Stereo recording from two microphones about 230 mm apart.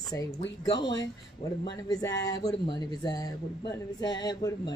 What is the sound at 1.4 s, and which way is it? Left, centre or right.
Speech, left.